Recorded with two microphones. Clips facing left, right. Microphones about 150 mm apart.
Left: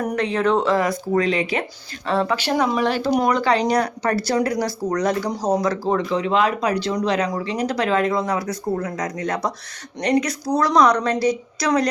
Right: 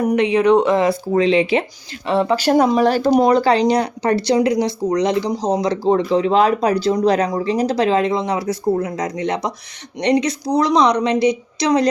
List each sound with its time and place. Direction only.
0.0 s speech: 10° right (ahead or behind)
2.3 s speech: 40° right (ahead or behind); by 11.9 s 25° right (ahead or behind)